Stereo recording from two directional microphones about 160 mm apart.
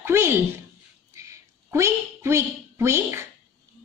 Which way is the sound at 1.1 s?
20° right (ahead or behind).